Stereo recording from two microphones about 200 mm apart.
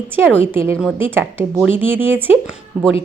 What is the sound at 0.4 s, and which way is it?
A woman's voice, 10° right (ahead or behind).